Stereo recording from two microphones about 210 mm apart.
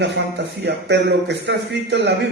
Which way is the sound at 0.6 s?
55° right (ahead or behind).